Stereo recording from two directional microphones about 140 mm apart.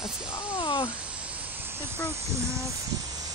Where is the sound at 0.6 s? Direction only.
35° left (ahead or behind).